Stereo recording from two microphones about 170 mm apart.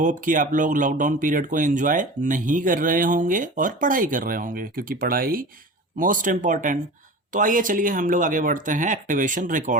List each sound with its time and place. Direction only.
0.0 s speech: 50° right (ahead or behind)